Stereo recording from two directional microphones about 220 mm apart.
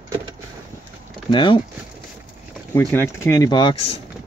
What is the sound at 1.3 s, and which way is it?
Speech, 20° left (ahead or behind).